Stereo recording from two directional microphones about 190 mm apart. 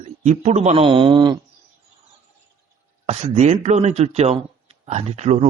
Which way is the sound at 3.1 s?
35° right (ahead or behind).